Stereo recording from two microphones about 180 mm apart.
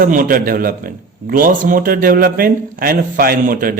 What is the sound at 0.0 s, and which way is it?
Speech, 50° right (ahead or behind).